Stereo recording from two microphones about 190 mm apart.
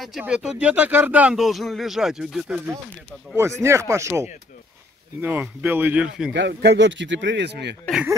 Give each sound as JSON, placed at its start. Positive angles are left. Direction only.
{"t": 0.0, "sound": "speech", "side_deg": -5}
{"t": 6.3, "sound": "speech", "side_deg": -65}
{"t": 7.8, "sound": "speech", "side_deg": -5}